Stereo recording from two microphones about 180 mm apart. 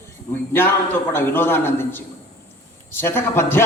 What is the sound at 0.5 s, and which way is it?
Speech, 15° left (ahead or behind).